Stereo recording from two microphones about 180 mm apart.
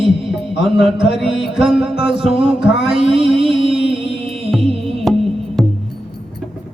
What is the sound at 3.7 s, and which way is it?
Music, 5° right (ahead or behind).